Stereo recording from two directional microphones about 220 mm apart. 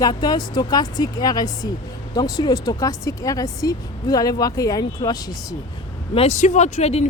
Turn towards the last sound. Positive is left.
turn(degrees=30)  # may be behind; listen again after turning